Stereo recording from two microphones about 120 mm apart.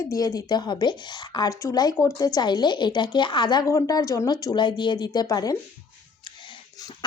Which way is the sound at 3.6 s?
25° left (ahead or behind).